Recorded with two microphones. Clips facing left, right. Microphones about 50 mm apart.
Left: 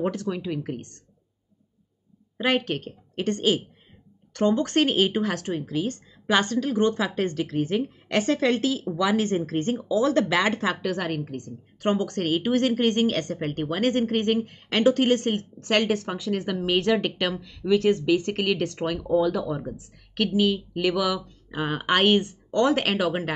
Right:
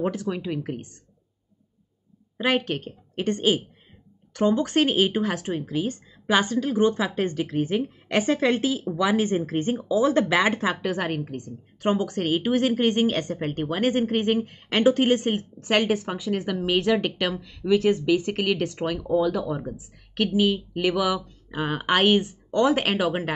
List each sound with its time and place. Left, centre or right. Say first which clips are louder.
0.0 s a woman's voice: even; centre
2.3 s a woman's voice: even; centre